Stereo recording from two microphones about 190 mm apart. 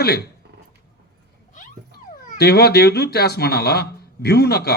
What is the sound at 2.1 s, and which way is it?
A man's voice, 50° left (ahead or behind).